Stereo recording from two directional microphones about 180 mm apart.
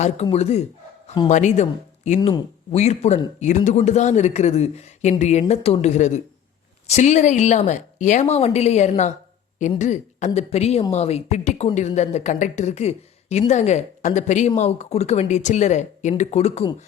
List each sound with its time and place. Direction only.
0.0 s speech: 35° left (ahead or behind)